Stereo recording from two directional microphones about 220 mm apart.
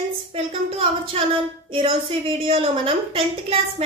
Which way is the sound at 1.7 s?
25° right (ahead or behind).